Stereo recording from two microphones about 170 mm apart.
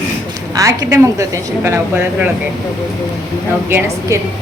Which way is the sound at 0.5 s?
20° right (ahead or behind).